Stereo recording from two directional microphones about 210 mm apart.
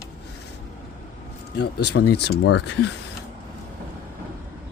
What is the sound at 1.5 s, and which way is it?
Speech, 50° left (ahead or behind).